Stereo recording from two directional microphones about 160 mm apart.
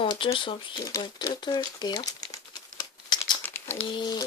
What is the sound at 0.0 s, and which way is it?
Speech, 35° left (ahead or behind).